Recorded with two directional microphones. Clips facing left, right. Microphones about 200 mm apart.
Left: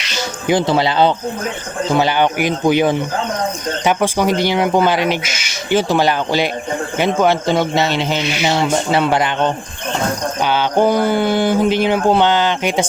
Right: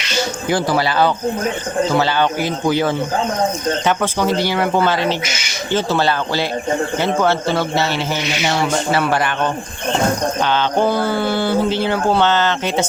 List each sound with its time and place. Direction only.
0.4 s a man's voice: 20° left (ahead or behind)